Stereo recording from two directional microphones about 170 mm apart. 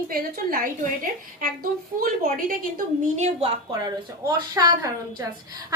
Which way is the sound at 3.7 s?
25° right (ahead or behind).